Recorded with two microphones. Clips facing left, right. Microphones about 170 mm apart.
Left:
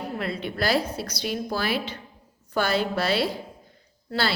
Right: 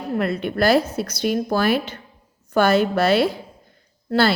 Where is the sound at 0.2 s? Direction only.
50° right (ahead or behind).